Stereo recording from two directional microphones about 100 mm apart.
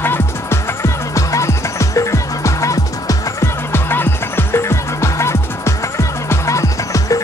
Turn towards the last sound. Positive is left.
turn(degrees=35)  # may be behind; listen again after turning